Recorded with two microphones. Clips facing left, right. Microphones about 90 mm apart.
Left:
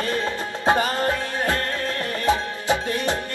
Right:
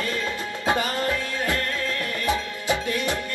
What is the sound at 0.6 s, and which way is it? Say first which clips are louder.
Music: left 4 dB; 30° left (ahead or behind).